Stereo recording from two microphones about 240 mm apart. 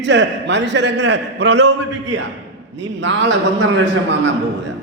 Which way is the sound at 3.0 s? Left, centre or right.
Right.